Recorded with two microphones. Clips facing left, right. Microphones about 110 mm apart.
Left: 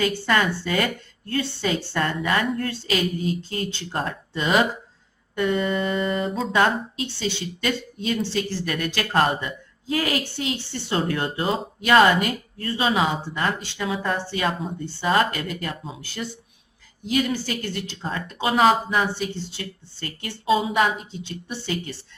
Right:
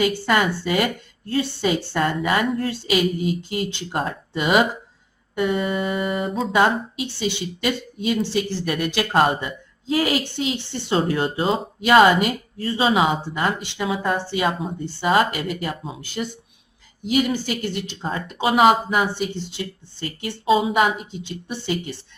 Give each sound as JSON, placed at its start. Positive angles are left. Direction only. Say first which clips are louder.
{"t": 0.3, "sound": "speech", "louder": "right 2 dB", "side_deg": -15}
{"t": 20.6, "sound": "speech", "louder": "right 2 dB", "side_deg": -10}